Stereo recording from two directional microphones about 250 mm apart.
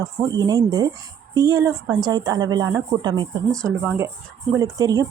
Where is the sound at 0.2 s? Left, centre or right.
Centre.